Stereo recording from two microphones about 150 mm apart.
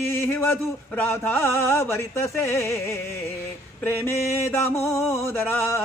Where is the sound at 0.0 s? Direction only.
15° left (ahead or behind).